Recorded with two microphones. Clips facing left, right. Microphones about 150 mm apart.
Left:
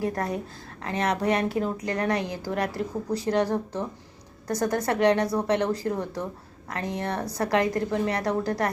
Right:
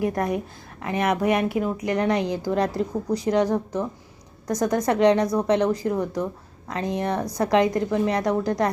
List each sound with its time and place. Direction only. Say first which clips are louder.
0.0 s a woman's voice: right 4 dB; 15° right (ahead or behind)
4.9 s a woman's voice: right 4 dB; 20° right (ahead or behind)